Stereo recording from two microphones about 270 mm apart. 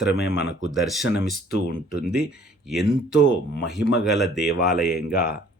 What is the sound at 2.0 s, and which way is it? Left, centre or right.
Speech, centre.